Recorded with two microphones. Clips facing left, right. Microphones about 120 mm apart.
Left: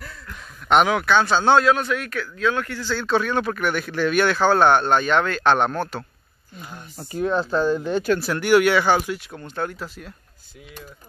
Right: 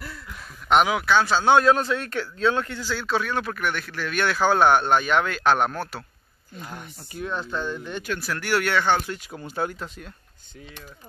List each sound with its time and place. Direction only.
0.0 s a sound: 5° right (ahead or behind)
1.6 s a man's voice: 30° right (ahead or behind)
2.8 s speech: 5° right (ahead or behind)
4.0 s speech: 25° left (ahead or behind)
4.3 s speech: 10° right (ahead or behind)
7.2 s speech: 35° left (ahead or behind)
8.3 s speech: 15° left (ahead or behind); by 10.1 s centre (ahead or behind)